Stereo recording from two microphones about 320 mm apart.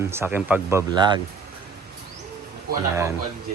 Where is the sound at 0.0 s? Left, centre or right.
Centre.